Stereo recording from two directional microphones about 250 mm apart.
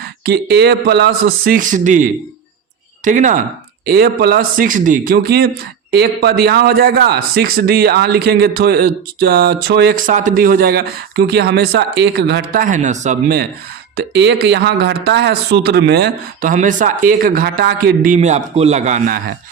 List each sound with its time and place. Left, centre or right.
0.3 s a man's voice: right